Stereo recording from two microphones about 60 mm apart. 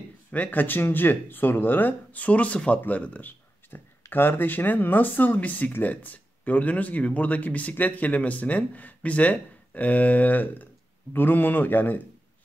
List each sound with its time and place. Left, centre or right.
0.3 s speech: left